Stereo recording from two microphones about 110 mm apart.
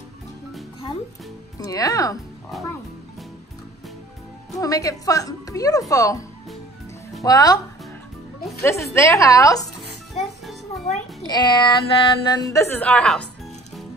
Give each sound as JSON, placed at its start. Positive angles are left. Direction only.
{"t": 1.6, "sound": "speech", "side_deg": 35}
{"t": 4.6, "sound": "speech", "side_deg": 30}
{"t": 7.2, "sound": "speech", "side_deg": 35}
{"t": 8.9, "sound": "a woman's voice", "side_deg": 25}
{"t": 10.9, "sound": "music", "side_deg": 90}
{"t": 11.2, "sound": "speech", "side_deg": 40}
{"t": 12.5, "sound": "a woman's voice", "side_deg": 20}